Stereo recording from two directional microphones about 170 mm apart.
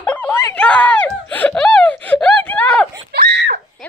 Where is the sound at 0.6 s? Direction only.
5° left (ahead or behind).